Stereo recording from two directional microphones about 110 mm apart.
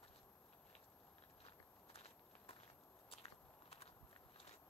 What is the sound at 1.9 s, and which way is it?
Walk, 65° left (ahead or behind).